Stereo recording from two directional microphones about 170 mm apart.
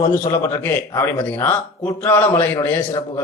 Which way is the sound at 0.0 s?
15° left (ahead or behind).